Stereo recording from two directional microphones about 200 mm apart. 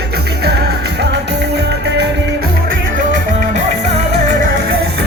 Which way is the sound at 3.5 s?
35° right (ahead or behind).